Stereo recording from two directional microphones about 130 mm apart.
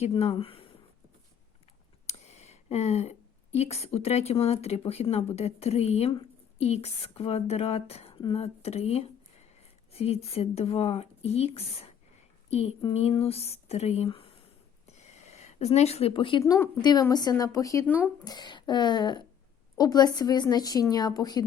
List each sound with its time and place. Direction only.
0.1 s speech: 45° left (ahead or behind)
2.0 s a woman's voice: 55° left (ahead or behind)
14.8 s a sound: 60° left (ahead or behind); by 16.4 s 40° left (ahead or behind)
16.4 s speech: 25° left (ahead or behind)
17.8 s speech: 15° left (ahead or behind)
18.3 s speech: 35° left (ahead or behind)